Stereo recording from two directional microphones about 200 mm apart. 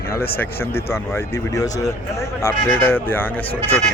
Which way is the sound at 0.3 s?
10° left (ahead or behind).